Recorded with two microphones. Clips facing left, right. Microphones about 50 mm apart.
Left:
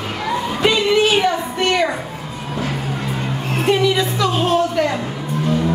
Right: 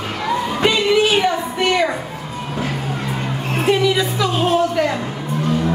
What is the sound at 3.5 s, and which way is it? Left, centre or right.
Music, centre.